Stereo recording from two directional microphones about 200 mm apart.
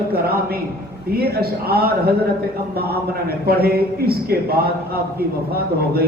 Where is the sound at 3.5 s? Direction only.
50° right (ahead or behind).